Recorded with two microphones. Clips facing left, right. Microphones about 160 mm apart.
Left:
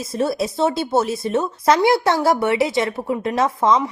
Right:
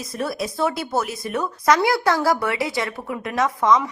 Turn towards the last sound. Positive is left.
turn(degrees=30)  # may be behind; listen again after turning